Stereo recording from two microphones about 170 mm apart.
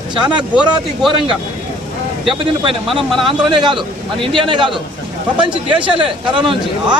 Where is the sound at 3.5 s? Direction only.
25° right (ahead or behind).